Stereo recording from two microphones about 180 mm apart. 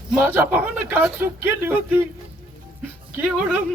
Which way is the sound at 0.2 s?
10° right (ahead or behind).